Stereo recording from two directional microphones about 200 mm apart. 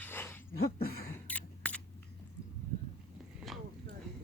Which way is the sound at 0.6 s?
50° left (ahead or behind).